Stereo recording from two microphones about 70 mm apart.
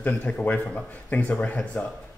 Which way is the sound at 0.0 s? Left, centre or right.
Left.